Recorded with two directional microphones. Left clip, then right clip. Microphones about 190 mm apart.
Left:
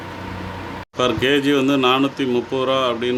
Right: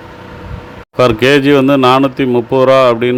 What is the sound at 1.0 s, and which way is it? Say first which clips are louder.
Speech: right 9 dB; 45° right (ahead or behind).